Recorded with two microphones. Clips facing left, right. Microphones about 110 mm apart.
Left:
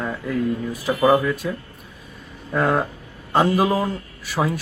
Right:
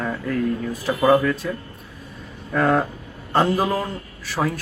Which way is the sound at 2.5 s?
10° left (ahead or behind).